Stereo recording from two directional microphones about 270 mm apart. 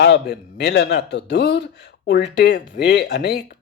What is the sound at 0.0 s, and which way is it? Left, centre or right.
Speech, left.